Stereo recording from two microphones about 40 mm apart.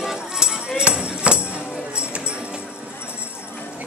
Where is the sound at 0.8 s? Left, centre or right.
Right.